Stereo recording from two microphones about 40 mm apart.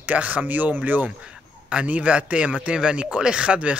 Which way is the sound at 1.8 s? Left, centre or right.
Right.